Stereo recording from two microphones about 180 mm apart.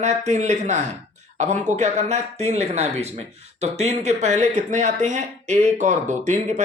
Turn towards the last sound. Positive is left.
turn(degrees=-40)  # may be behind; listen again after turning